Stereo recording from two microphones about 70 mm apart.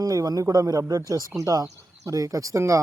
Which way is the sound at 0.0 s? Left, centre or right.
Right.